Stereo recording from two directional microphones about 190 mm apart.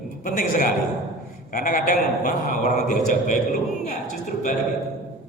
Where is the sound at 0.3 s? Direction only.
45° left (ahead or behind).